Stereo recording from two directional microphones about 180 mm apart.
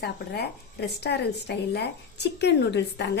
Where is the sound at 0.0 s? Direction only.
65° left (ahead or behind).